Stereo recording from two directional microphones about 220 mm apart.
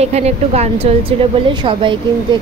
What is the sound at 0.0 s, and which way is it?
A woman's voice, 30° right (ahead or behind).